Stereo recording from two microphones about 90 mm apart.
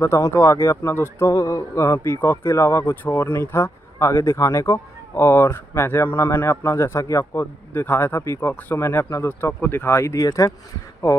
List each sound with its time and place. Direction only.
0.0 s speech: 35° left (ahead or behind)